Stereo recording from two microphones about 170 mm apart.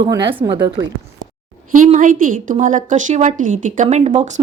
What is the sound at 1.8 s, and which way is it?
Speech, 50° right (ahead or behind).